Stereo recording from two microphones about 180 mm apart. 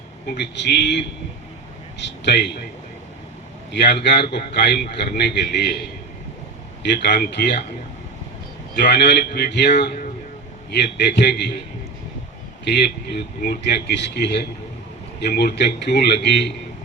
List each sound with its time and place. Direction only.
0.6 s a man's voice: 75° left (ahead or behind)
3.7 s a man's voice: 70° left (ahead or behind)
6.9 s a man's voice: 65° left (ahead or behind)
8.7 s a man's voice: 70° left (ahead or behind)
12.6 s a man's voice: 70° left (ahead or behind)